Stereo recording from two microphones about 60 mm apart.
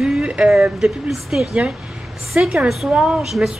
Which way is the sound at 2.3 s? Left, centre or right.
Centre.